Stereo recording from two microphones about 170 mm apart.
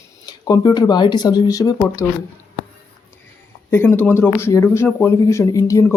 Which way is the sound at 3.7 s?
10° left (ahead or behind).